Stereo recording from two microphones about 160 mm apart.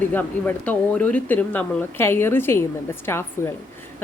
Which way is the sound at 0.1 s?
10° left (ahead or behind).